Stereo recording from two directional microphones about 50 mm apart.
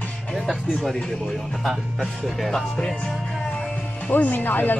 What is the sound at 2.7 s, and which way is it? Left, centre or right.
Music, centre.